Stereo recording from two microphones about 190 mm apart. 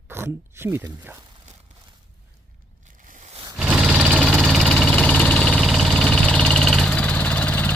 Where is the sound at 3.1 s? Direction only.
40° right (ahead or behind).